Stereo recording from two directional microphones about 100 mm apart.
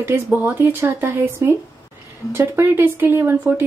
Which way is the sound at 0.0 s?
20° right (ahead or behind).